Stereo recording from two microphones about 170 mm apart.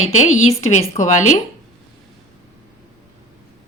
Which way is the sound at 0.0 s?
40° left (ahead or behind).